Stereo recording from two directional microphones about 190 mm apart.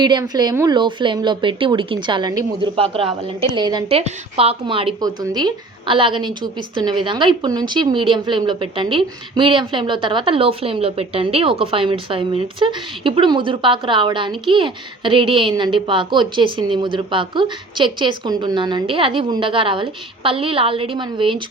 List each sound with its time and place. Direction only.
0.0 s a woman's voice: 20° right (ahead or behind)